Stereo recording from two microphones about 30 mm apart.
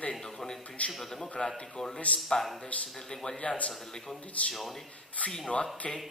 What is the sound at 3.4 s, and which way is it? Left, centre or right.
A man's voice, left.